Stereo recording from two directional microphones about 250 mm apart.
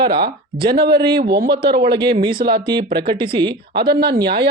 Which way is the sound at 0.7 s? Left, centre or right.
Right.